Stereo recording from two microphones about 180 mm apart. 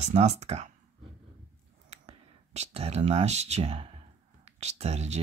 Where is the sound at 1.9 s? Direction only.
35° right (ahead or behind).